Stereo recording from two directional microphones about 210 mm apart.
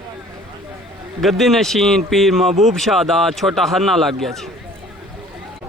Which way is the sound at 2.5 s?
30° right (ahead or behind).